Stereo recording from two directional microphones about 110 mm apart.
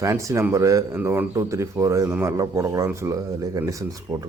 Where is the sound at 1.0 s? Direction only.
20° right (ahead or behind).